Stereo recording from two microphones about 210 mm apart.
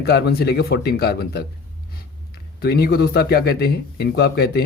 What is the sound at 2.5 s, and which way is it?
Speech, 50° left (ahead or behind).